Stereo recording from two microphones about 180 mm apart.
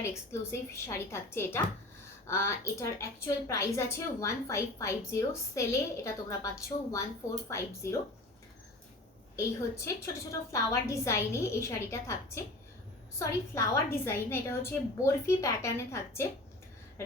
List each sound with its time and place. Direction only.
0.0 s a woman's voice: 15° left (ahead or behind)
9.3 s a woman's voice: 15° left (ahead or behind)